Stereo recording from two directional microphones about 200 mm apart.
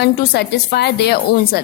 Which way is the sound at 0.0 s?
55° left (ahead or behind).